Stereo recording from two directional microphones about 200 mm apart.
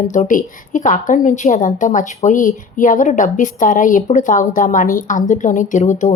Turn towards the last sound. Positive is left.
turn(degrees=40)  # may be behind; listen again after turning